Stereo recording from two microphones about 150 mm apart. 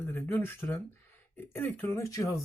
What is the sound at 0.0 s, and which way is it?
Speech, 15° left (ahead or behind).